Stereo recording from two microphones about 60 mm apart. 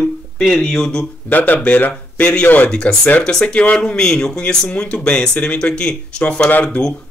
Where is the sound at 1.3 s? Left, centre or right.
Left.